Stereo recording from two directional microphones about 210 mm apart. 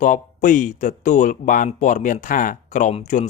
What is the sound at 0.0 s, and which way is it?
Speech, 40° left (ahead or behind).